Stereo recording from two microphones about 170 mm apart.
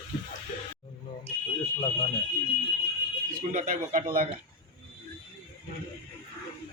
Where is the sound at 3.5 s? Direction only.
50° right (ahead or behind).